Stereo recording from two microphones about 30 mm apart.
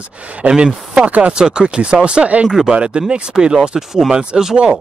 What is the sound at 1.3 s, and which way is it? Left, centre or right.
Speech, right.